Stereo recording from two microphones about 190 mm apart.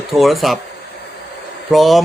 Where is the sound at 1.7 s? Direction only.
Centre (ahead or behind).